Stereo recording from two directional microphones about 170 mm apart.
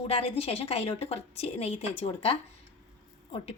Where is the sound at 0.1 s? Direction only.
35° left (ahead or behind).